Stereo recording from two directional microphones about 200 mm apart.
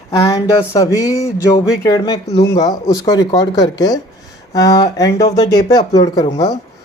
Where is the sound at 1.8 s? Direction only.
20° left (ahead or behind).